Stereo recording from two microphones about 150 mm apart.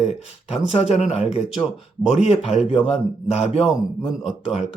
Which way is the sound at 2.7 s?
45° left (ahead or behind).